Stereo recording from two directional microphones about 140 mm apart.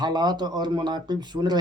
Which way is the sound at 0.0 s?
30° right (ahead or behind).